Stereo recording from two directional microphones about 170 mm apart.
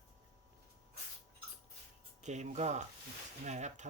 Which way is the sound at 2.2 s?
45° right (ahead or behind).